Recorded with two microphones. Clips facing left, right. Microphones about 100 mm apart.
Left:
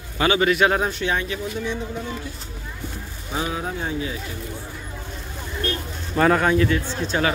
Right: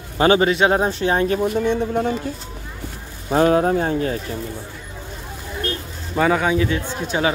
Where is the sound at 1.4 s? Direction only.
55° right (ahead or behind).